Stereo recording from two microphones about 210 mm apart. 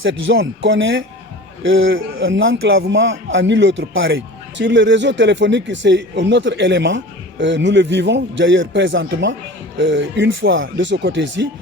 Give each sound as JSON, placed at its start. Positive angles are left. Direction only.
{"t": 0.0, "sound": "a man's voice", "side_deg": -65}